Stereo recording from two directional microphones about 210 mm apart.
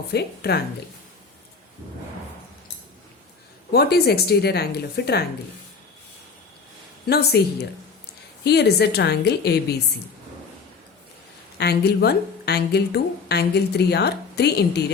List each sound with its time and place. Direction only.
0.1 s speech: 50° left (ahead or behind)
3.7 s speech: 50° left (ahead or behind)
7.1 s speech: 50° left (ahead or behind)
11.5 s speech: 50° left (ahead or behind)